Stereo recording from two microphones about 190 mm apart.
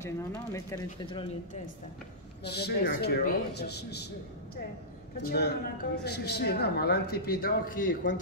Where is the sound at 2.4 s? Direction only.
60° left (ahead or behind).